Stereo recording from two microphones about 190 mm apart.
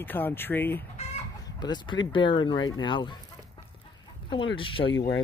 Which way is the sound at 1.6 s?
25° left (ahead or behind).